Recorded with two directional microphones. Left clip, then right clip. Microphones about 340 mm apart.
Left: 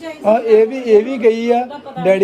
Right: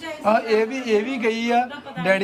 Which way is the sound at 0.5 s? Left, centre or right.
Right.